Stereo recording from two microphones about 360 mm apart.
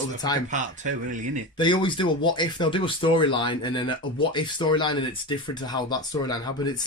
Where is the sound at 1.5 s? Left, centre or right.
Centre.